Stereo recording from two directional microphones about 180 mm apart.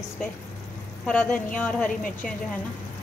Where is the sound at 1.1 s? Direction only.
5° left (ahead or behind).